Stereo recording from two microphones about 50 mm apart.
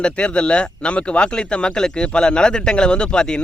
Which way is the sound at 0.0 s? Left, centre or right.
Left.